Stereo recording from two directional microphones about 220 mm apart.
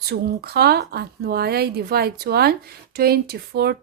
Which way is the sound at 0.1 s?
45° right (ahead or behind).